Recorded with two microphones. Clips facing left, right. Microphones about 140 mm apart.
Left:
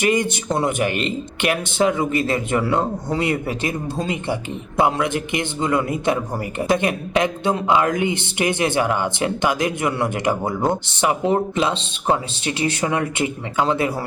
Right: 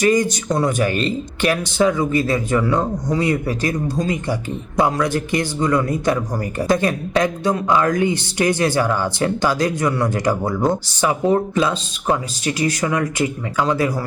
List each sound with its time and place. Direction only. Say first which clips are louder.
0.0 s a man's voice: right 3 dB; 25° left (ahead or behind)